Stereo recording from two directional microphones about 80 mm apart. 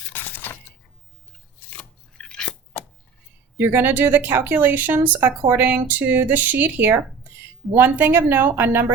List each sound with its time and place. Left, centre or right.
0.1 s a sound: left
1.7 s scissors: centre
3.6 s speech: right